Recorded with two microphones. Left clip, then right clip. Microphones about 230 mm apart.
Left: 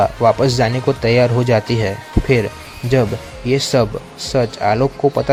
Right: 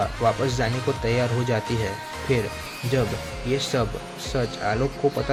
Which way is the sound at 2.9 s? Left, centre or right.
Left.